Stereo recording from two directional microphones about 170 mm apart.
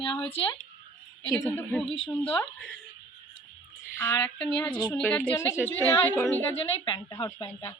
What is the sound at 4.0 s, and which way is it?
Speech, 15° left (ahead or behind).